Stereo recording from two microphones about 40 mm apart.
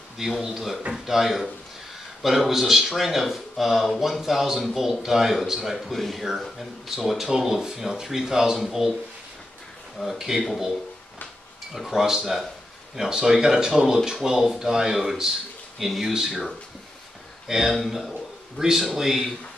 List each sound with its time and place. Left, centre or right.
0.4 s speech: centre
9.9 s speech: centre
11.7 s speech: centre
17.5 s speech: centre